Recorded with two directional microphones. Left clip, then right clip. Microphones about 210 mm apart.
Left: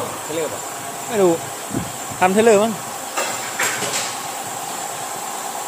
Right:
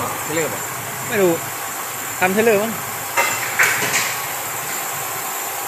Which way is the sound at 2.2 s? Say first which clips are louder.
Left 2 dB; 20° left (ahead or behind).